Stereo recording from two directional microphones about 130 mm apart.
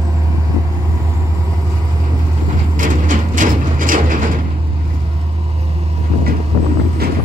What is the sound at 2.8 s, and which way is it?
Vehicle, 90° right.